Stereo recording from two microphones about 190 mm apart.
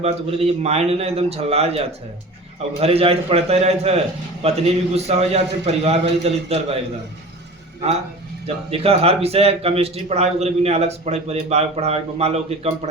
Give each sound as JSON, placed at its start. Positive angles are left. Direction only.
{"t": 0.0, "sound": "a man's voice", "side_deg": -30}
{"t": 7.8, "sound": "a man's voice", "side_deg": -35}